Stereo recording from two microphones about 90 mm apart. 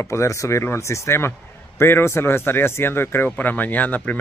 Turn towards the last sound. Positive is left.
turn(degrees=15)  # may be behind; listen again after turning